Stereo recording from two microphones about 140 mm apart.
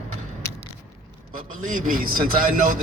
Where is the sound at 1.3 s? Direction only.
70° right (ahead or behind).